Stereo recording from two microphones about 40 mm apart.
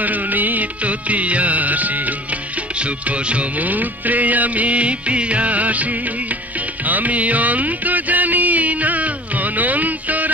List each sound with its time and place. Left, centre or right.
0.0 s music of bollywood: right
2.8 s music: right